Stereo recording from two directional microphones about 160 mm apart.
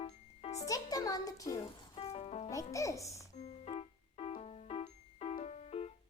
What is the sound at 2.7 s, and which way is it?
Speech, 20° left (ahead or behind).